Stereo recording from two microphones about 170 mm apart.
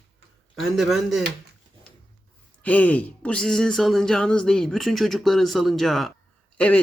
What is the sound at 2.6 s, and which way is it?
Speech, 10° left (ahead or behind).